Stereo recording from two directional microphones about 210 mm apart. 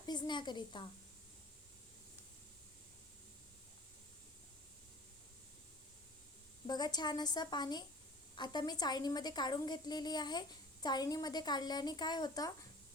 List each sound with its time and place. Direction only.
0.0 s a woman's voice: 20° left (ahead or behind)
6.7 s a woman's voice: 20° left (ahead or behind)